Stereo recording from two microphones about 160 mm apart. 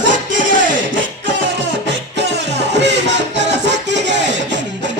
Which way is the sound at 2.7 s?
90° right.